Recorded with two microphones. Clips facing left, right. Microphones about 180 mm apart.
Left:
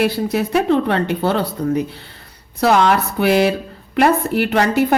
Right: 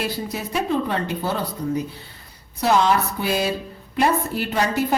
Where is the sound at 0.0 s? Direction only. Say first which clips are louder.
Left 9 dB; 70° left (ahead or behind).